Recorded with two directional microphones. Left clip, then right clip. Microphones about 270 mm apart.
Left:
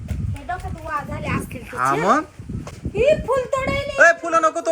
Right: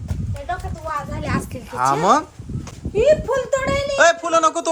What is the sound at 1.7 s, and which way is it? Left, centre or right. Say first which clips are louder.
Speech: right 2 dB; centre.